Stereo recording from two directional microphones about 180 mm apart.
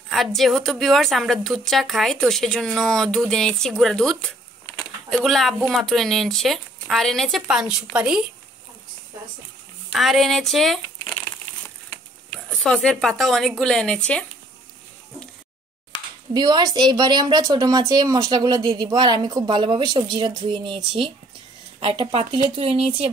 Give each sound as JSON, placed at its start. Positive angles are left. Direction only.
{"t": 0.1, "sound": "a woman's voice", "side_deg": 0}
{"t": 9.9, "sound": "speech", "side_deg": 0}
{"t": 12.4, "sound": "a woman's voice", "side_deg": 5}
{"t": 16.3, "sound": "speech", "side_deg": -25}